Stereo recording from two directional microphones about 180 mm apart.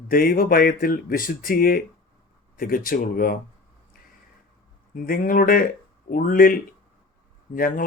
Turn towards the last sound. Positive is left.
turn(degrees=50)  # may be behind; listen again after turning